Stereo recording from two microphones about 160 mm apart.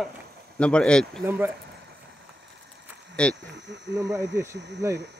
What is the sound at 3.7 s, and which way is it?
Speech, 90° right.